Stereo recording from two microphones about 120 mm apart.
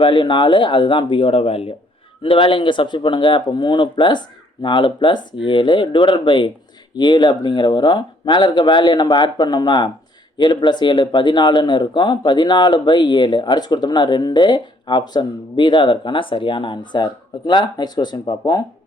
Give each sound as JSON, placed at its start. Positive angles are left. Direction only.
{"t": 0.0, "sound": "speech", "side_deg": 45}